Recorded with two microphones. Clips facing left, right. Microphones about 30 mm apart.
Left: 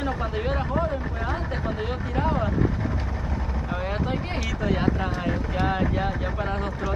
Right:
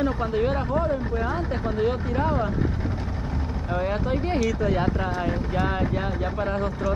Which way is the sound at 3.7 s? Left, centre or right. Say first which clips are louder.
Right 3 dB; centre.